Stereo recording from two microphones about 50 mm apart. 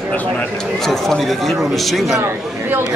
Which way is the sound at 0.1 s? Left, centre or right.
Left.